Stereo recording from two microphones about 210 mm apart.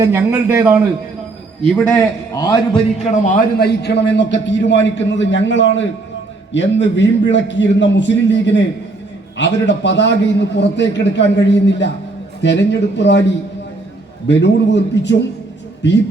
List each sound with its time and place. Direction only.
0.0 s a man's voice: 10° right (ahead or behind)
1.6 s a man's voice: 5° left (ahead or behind)
2.3 s a man's voice: 20° left (ahead or behind)
3.6 s a man's voice: 55° left (ahead or behind)
14.3 s a man's voice: 55° left (ahead or behind)